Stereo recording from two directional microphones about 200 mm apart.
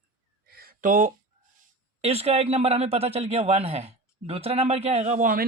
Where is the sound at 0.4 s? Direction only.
50° right (ahead or behind).